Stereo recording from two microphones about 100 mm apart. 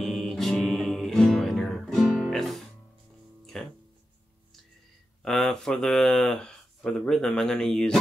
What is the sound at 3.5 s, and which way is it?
Music, centre (ahead or behind).